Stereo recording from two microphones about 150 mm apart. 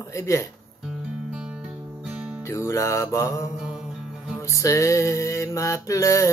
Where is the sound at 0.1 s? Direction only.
20° left (ahead or behind).